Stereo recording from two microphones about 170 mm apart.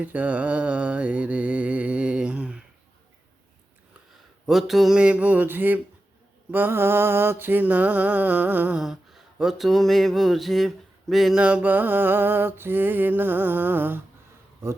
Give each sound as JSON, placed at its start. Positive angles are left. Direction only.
{"t": 0.0, "sound": "mantra", "side_deg": -10}
{"t": 4.4, "sound": "mantra", "side_deg": 0}